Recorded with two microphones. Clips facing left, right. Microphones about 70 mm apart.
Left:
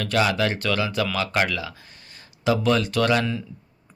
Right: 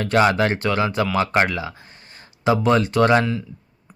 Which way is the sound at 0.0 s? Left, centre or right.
Right.